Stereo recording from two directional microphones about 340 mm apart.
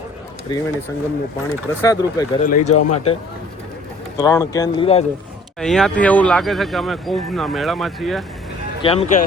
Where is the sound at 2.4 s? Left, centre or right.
Left.